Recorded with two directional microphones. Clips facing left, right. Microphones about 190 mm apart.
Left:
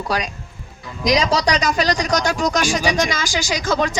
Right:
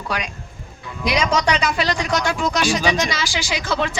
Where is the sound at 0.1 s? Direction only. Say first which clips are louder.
Left 2 dB; 35° left (ahead or behind).